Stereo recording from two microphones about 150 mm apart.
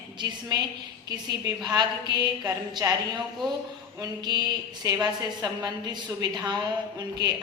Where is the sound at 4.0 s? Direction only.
30° right (ahead or behind).